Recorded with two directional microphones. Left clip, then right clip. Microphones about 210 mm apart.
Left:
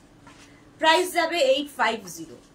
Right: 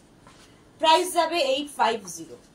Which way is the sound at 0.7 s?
15° left (ahead or behind).